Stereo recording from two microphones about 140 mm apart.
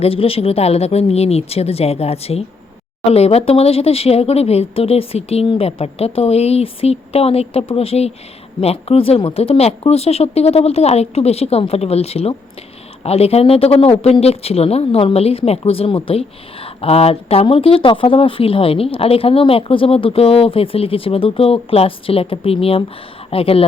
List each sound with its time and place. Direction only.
0.0 s speech: 40° left (ahead or behind)